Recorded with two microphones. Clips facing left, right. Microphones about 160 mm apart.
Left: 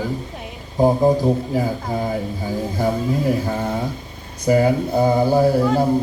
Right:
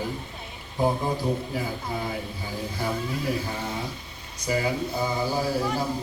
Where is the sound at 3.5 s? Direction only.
50° left (ahead or behind).